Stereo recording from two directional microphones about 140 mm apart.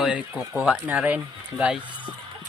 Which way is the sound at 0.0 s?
5° right (ahead or behind).